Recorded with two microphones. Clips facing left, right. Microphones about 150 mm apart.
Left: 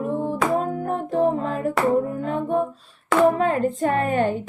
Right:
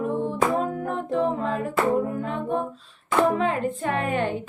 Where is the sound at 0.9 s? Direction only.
40° left (ahead or behind).